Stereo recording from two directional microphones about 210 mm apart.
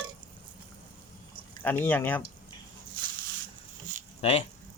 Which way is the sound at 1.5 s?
10° left (ahead or behind).